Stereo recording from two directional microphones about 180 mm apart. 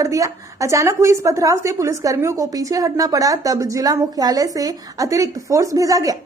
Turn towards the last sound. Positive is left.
turn(degrees=-20)  # may be behind; listen again after turning